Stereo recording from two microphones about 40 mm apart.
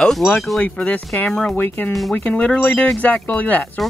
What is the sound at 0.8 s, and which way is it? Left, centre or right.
Speech, left.